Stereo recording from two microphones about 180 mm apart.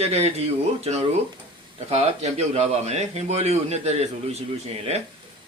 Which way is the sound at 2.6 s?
35° right (ahead or behind).